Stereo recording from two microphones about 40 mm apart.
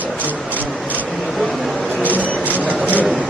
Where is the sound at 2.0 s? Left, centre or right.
Right.